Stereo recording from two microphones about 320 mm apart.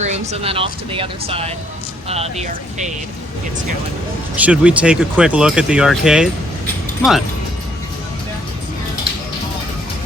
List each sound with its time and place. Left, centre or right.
0.0 s speech: right
4.4 s speech: centre